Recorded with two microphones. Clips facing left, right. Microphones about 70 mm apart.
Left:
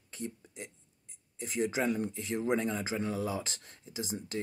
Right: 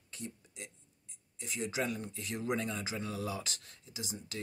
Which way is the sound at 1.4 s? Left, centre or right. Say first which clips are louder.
Left 5 dB; left.